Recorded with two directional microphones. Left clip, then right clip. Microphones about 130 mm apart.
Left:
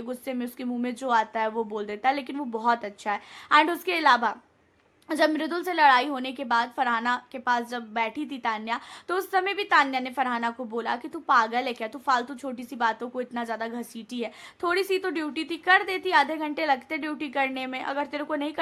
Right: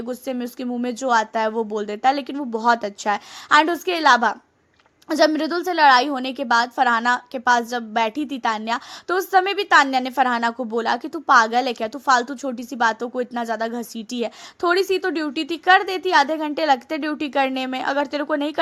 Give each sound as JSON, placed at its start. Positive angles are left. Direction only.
{"t": 0.0, "sound": "a woman's voice", "side_deg": -35}